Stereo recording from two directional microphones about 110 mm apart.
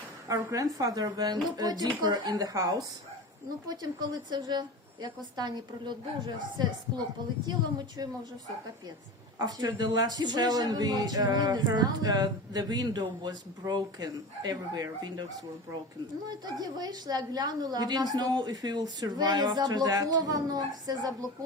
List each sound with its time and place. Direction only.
0.3 s a man's voice: 30° right (ahead or behind)
9.4 s a man's voice: 35° right (ahead or behind)
16.3 s a man's voice: 40° right (ahead or behind)